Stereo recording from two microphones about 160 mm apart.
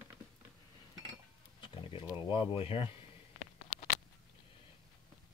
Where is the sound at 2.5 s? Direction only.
35° left (ahead or behind).